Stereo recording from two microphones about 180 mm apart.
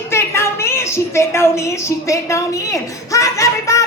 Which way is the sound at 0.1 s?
15° left (ahead or behind).